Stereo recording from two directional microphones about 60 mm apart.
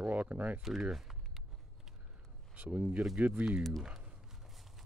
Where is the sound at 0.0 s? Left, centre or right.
Right.